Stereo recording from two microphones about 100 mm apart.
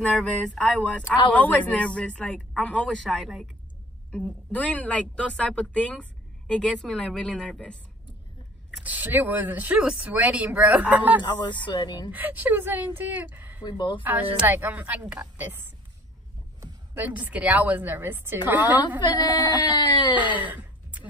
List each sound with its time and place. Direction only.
0.1 s speech: 10° left (ahead or behind)
4.5 s speech: 15° left (ahead or behind)
8.8 s speech: 15° right (ahead or behind)
11.6 s speech: 50° left (ahead or behind)
12.1 s speech: 15° right (ahead or behind)
13.7 s speech: 55° left (ahead or behind)
14.0 s speech: 15° right (ahead or behind)
16.9 s speech: 20° right (ahead or behind)
18.9 s speech: 45° left (ahead or behind)
20.2 s a sound: 15° right (ahead or behind)